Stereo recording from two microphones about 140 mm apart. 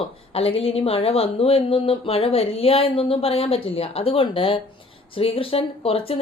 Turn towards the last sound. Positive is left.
turn(degrees=40)  # may be behind; listen again after turning